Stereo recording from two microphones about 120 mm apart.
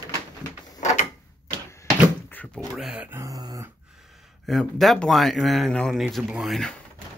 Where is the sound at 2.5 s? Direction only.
5° right (ahead or behind).